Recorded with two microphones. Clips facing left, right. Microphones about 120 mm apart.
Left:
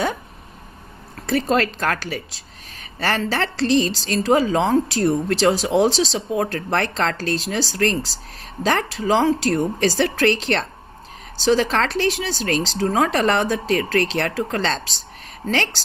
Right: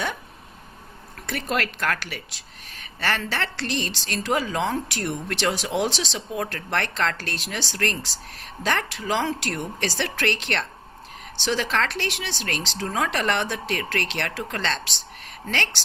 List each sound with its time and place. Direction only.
1.3 s speech: 30° left (ahead or behind)